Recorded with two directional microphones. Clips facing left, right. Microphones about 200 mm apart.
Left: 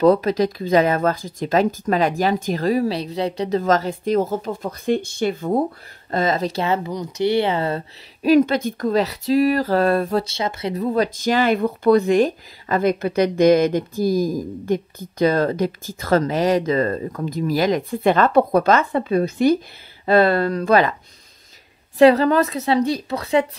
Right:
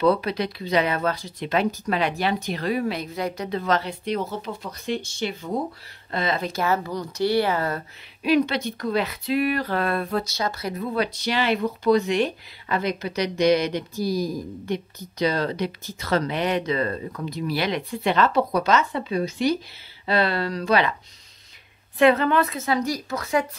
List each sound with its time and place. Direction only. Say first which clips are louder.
0.0 s speech: left 6 dB; 45° left (ahead or behind)
6.1 s speech: left 5 dB; 40° left (ahead or behind)
6.6 s speech: left 2 dB; 20° left (ahead or behind)
8.2 s speech: left 6 dB; 45° left (ahead or behind)
10.3 s speech: left 3 dB; 25° left (ahead or behind)
10.8 s speech: left 6 dB; 40° left (ahead or behind)
21.9 s speech: left 5 dB; 35° left (ahead or behind)